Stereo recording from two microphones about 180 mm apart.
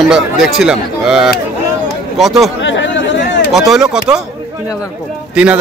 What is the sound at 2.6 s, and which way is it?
Chatter, 90° left.